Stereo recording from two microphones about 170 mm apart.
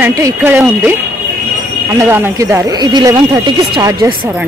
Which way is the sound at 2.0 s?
15° right (ahead or behind).